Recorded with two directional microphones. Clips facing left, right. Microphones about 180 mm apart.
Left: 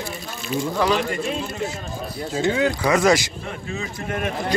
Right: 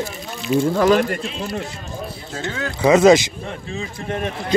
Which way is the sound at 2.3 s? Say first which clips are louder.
Left 8 dB; 15° left (ahead or behind).